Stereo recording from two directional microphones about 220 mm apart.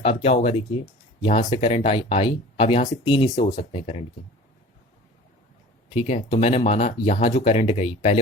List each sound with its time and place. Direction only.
0.0 s speech: 25° left (ahead or behind)
5.9 s speech: 25° left (ahead or behind)